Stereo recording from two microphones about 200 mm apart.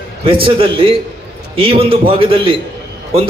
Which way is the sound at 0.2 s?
25° right (ahead or behind).